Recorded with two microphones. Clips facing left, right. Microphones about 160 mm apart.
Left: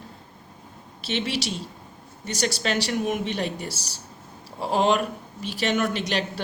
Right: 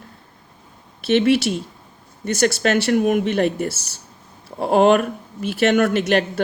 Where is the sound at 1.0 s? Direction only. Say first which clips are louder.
Right 11 dB; 55° right (ahead or behind).